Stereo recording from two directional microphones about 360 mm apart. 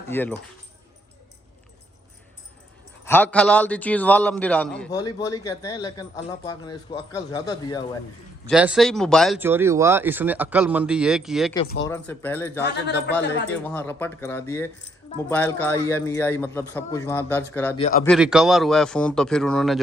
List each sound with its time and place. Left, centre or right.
0.1 s speech: centre
3.0 s a man's voice: centre
8.4 s speech: centre
11.5 s a man's voice: centre
11.9 s speech: centre
12.6 s a man's voice: left
13.5 s a man's voice: centre
17.7 s a man's voice: centre
18.0 s speech: centre